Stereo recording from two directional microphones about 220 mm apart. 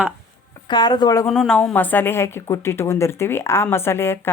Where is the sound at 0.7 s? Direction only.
20° left (ahead or behind).